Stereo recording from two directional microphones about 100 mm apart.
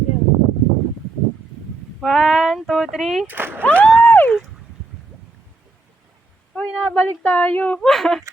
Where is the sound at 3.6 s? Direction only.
15° left (ahead or behind).